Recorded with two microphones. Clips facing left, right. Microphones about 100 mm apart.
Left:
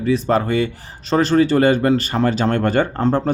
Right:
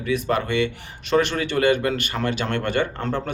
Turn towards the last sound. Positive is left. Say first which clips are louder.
# left 8 dB
turn(degrees=35)  # may be behind; listen again after turning